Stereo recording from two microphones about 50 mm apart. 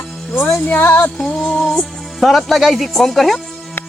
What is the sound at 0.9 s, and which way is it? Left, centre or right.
Music, left.